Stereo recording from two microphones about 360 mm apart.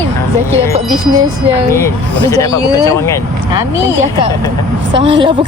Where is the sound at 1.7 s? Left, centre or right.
Centre.